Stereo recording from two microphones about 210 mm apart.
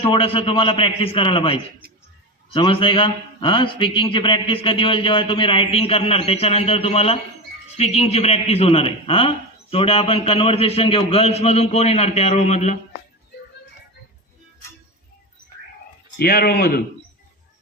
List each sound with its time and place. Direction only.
0.0 s a man's voice: 25° left (ahead or behind)
16.1 s speech: 50° left (ahead or behind)